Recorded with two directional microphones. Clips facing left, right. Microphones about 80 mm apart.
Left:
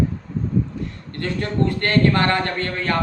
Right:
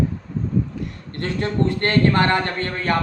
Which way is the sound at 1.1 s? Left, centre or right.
Right.